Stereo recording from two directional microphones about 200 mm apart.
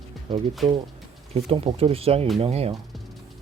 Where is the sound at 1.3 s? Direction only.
30° right (ahead or behind).